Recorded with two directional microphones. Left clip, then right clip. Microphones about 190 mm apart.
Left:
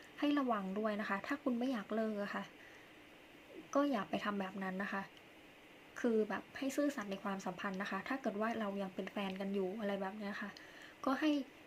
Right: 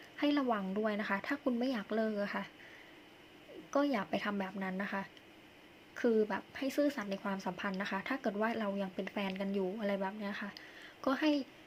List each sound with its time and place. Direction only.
0.2 s speech: 5° right (ahead or behind)
3.7 s speech: 5° right (ahead or behind)